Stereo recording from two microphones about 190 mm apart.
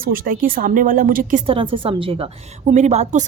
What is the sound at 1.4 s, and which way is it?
A woman's voice, 30° right (ahead or behind).